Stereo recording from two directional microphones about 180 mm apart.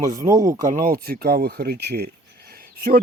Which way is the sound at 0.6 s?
50° right (ahead or behind).